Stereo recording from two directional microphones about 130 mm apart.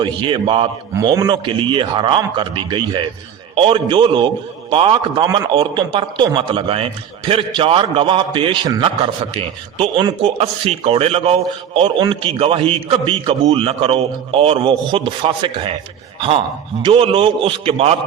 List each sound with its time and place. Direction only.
0.0 s a man's voice: 35° right (ahead or behind)
0.9 s a man's voice: 25° right (ahead or behind)
16.8 s a man's voice: 45° right (ahead or behind)